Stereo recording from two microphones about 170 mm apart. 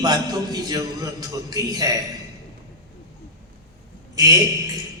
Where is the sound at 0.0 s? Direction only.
25° right (ahead or behind).